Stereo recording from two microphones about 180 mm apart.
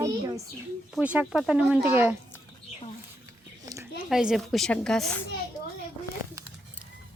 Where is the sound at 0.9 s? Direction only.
5° right (ahead or behind).